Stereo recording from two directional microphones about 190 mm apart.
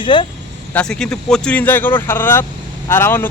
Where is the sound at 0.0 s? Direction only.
25° left (ahead or behind).